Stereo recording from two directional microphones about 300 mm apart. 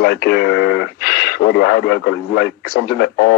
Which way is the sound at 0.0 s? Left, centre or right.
Left.